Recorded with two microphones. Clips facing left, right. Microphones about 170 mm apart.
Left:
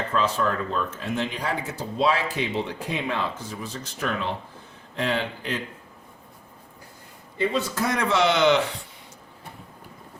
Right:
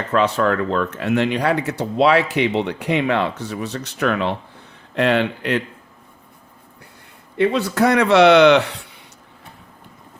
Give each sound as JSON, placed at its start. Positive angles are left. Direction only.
{"t": 0.1, "sound": "speech", "side_deg": -70}
{"t": 7.3, "sound": "speech", "side_deg": -70}